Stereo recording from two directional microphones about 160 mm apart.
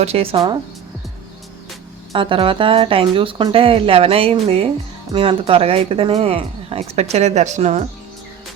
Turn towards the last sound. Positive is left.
turn(degrees=-45)  # may be behind; listen again after turning